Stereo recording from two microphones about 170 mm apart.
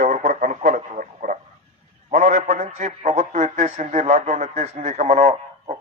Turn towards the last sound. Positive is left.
turn(degrees=-40)  # may be behind; listen again after turning